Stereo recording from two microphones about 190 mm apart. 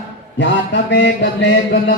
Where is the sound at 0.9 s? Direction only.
65° left (ahead or behind).